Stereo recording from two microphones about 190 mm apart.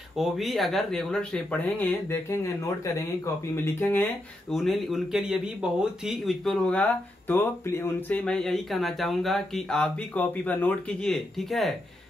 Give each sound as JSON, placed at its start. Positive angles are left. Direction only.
{"t": 0.2, "sound": "speech", "side_deg": 0}